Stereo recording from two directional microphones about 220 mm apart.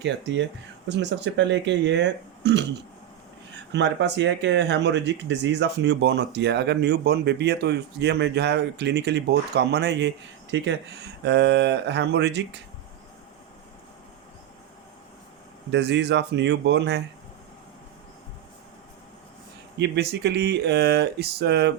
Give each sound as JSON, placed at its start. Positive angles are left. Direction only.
{"t": 0.0, "sound": "speech", "side_deg": -55}
{"t": 15.7, "sound": "speech", "side_deg": -50}
{"t": 19.8, "sound": "speech", "side_deg": -50}